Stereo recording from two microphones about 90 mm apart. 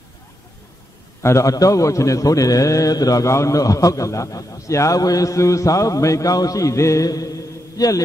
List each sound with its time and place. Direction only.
1.2 s a man's voice: 35° left (ahead or behind)